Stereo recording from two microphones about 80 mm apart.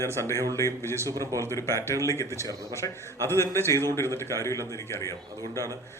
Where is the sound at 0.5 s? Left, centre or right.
Left.